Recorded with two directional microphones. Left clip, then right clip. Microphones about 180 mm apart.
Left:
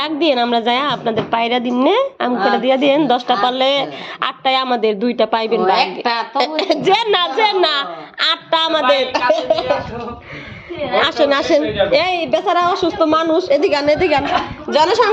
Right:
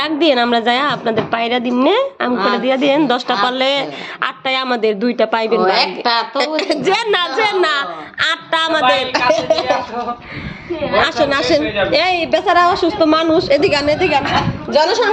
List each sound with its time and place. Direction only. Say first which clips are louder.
0.0 s a woman's voice: right 2 dB; 5° right (ahead or behind)
2.3 s a woman's voice: left 1 dB; 20° left (ahead or behind)
2.6 s a woman's voice: even; centre (ahead or behind)
5.5 s a woman's voice: even; 15° left (ahead or behind)
6.3 s a woman's voice: even; centre (ahead or behind)
11.0 s a woman's voice: left 2 dB; 10° left (ahead or behind)